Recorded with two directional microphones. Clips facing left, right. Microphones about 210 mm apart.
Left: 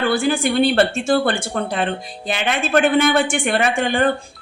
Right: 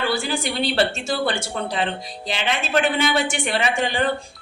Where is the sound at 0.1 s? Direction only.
55° left (ahead or behind).